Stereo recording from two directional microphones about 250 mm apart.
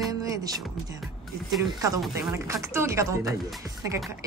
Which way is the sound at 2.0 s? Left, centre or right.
Centre.